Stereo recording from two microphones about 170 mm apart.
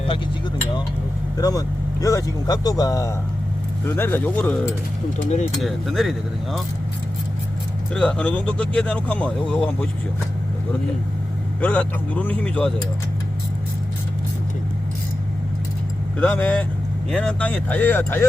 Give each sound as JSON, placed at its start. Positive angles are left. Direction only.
{"t": 1.4, "sound": "speech", "side_deg": 20}
{"t": 5.2, "sound": "speech", "side_deg": 45}
{"t": 5.5, "sound": "speech", "side_deg": 0}
{"t": 7.9, "sound": "speech", "side_deg": 5}
{"t": 11.6, "sound": "speech", "side_deg": 10}
{"t": 16.2, "sound": "speech", "side_deg": 10}